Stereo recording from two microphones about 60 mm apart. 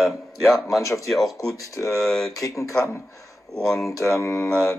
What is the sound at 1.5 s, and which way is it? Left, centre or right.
Speech, left.